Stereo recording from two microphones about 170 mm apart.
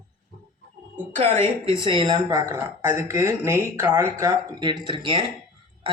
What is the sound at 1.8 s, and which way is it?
Speech, 30° right (ahead or behind).